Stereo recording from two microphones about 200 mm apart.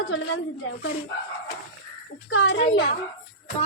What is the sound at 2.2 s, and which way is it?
Speech, 65° left (ahead or behind).